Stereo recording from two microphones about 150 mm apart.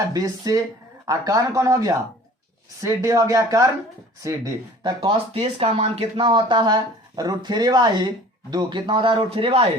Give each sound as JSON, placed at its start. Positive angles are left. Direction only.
{"t": 0.1, "sound": "speech", "side_deg": -25}